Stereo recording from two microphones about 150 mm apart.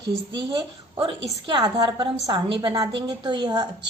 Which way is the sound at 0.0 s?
30° right (ahead or behind).